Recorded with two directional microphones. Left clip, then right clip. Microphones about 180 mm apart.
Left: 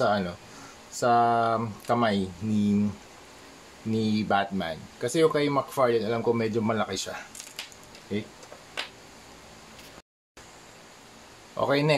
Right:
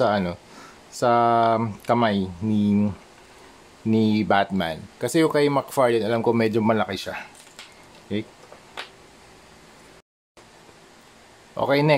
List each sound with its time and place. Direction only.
0.0 s speech: 50° right (ahead or behind)
3.9 s speech: 45° right (ahead or behind)
11.5 s speech: 40° right (ahead or behind)